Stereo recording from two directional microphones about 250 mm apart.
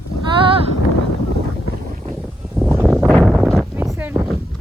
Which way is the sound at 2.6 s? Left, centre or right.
Centre.